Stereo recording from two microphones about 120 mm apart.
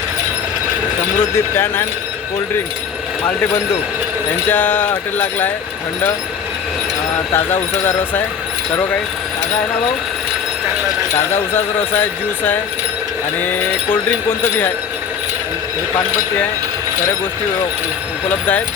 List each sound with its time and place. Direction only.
1.5 s speech: 20° left (ahead or behind)
3.2 s speech: 20° left (ahead or behind)
7.3 s speech: 20° left (ahead or behind)
11.9 s speech: 15° left (ahead or behind)
13.9 s speech: 15° left (ahead or behind)
18.3 s speech: 15° left (ahead or behind)